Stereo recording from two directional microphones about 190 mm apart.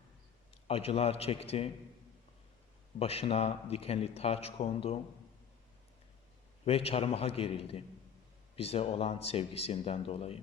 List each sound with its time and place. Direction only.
0.5 s a man's voice: 30° left (ahead or behind)
3.0 s a man's voice: 30° left (ahead or behind)
6.7 s a man's voice: 30° left (ahead or behind)